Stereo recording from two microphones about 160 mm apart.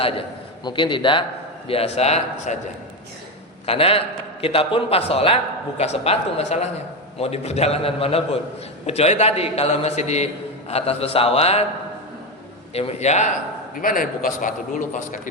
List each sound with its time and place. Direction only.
0.6 s a man's voice: 30° left (ahead or behind)
12.7 s a man's voice: 40° left (ahead or behind)
13.7 s a man's voice: 60° left (ahead or behind)